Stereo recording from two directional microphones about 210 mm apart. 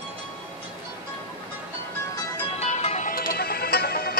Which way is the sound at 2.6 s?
30° left (ahead or behind).